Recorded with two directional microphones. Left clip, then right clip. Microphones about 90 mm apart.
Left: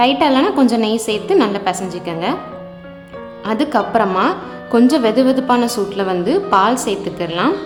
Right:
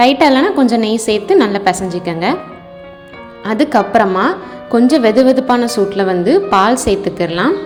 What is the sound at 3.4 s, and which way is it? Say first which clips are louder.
A woman's voice: right 4 dB; 30° right (ahead or behind).